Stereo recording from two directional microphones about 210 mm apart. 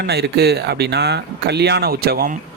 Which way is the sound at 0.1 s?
50° right (ahead or behind).